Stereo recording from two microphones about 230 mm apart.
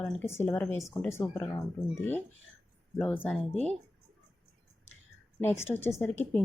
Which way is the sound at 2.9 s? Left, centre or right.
Centre.